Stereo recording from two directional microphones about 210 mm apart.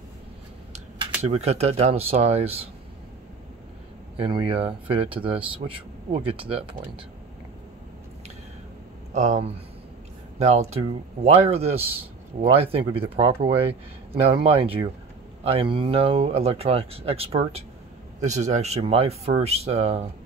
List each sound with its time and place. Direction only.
0.7 s speech: 30° right (ahead or behind)
4.2 s speech: 25° right (ahead or behind)
9.1 s speech: 30° right (ahead or behind)